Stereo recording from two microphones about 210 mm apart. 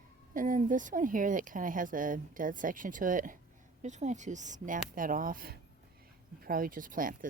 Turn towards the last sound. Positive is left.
turn(degrees=-40)  # may be behind; listen again after turning